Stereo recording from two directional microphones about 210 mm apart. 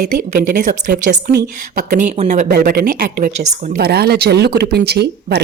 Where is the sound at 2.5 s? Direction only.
50° right (ahead or behind).